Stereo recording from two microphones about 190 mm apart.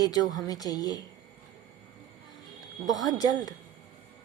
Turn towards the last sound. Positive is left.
turn(degrees=20)  # may be behind; listen again after turning